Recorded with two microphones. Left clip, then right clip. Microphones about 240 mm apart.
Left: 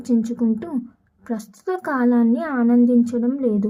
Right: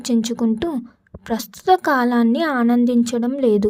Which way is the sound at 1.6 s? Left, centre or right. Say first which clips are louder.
Right 6 dB; right.